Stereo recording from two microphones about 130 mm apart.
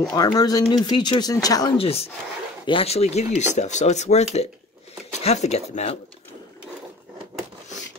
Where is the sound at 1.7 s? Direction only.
50° left (ahead or behind).